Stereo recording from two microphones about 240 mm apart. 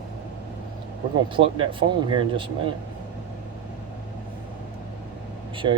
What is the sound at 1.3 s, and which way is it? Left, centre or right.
Speech, right.